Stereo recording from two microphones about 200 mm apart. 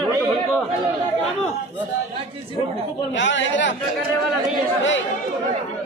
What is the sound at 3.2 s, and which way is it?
Speech, 65° left (ahead or behind).